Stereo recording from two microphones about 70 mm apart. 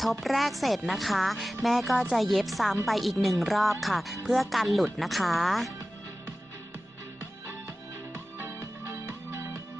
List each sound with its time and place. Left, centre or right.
0.0 s a woman's voice: centre
8.4 s music: right